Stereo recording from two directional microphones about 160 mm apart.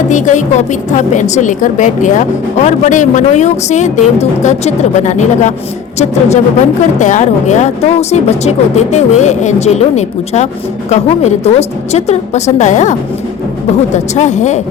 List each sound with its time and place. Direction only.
0.1 s speech: 50° left (ahead or behind)